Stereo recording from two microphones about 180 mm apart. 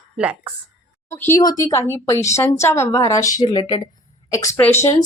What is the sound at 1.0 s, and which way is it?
A woman's voice, 10° left (ahead or behind).